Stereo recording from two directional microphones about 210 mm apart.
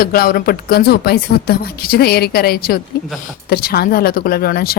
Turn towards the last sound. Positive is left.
turn(degrees=45)  # may be behind; listen again after turning